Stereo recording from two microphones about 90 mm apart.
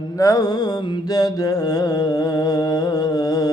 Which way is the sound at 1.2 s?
40° left (ahead or behind).